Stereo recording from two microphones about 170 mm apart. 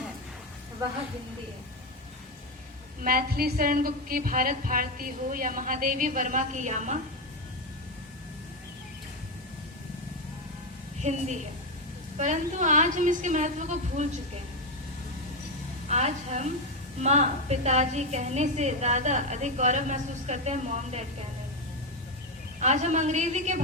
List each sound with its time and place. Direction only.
3.0 s a woman's voice: 60° right (ahead or behind)
11.0 s a woman's voice: 45° right (ahead or behind)
15.9 s a woman's voice: 40° right (ahead or behind)
22.6 s a woman's voice: 45° right (ahead or behind)